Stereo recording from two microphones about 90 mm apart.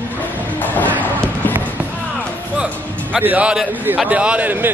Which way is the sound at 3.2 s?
15° right (ahead or behind).